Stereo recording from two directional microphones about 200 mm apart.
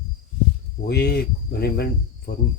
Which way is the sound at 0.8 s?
55° left (ahead or behind).